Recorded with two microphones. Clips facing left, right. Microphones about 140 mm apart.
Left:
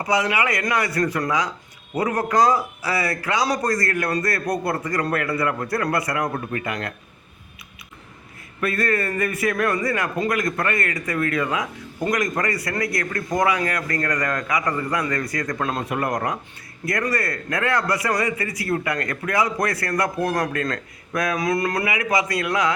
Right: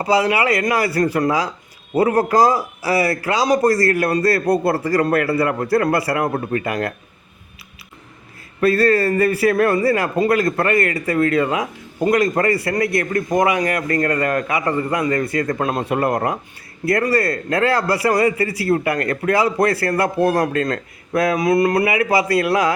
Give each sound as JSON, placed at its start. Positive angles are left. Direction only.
{"t": 0.0, "sound": "a man's voice", "side_deg": -30}
{"t": 8.6, "sound": "a man's voice", "side_deg": -30}